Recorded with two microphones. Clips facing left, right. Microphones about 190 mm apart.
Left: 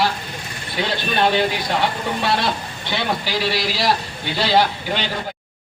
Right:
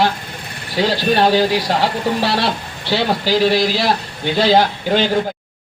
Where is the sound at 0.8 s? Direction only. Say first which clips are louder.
Right 5 dB; 35° right (ahead or behind).